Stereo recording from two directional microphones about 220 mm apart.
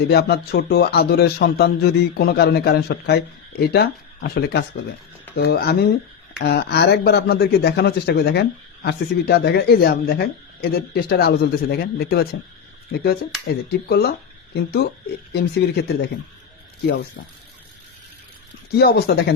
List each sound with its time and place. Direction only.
0.1 s speech: 45° left (ahead or behind)
13.7 s speech: 45° left (ahead or behind)
18.8 s speech: 45° left (ahead or behind)